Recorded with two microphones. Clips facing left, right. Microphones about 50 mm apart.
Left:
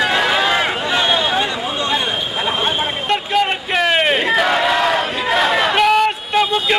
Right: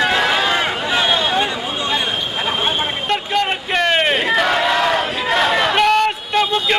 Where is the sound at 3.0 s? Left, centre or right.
Centre.